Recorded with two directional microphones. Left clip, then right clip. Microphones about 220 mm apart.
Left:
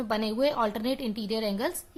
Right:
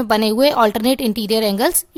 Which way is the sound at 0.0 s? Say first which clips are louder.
Right 12 dB; 45° right (ahead or behind).